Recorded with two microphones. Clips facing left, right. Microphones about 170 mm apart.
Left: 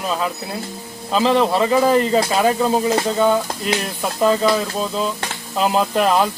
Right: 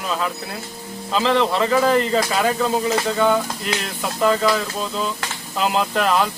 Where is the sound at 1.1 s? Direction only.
10° left (ahead or behind).